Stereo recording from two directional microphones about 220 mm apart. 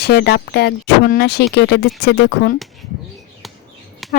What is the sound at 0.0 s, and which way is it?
Speech, 50° left (ahead or behind).